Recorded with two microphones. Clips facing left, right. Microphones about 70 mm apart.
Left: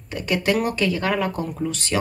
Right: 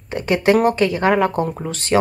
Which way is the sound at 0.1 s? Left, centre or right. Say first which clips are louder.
Right 6 dB; right.